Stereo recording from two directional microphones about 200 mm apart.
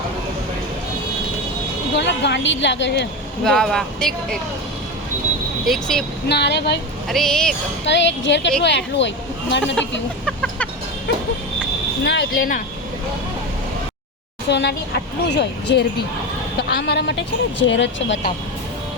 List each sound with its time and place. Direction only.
2.0 s speech: 60° left (ahead or behind)
3.4 s speech: centre (ahead or behind)
5.6 s speech: centre (ahead or behind)
6.2 s speech: 55° left (ahead or behind)
7.1 s speech: 5° left (ahead or behind)
7.9 s speech: 65° left (ahead or behind)
10.2 s vehicle: 5° left (ahead or behind)
12.0 s speech: 60° left (ahead or behind)
14.5 s speech: 55° left (ahead or behind)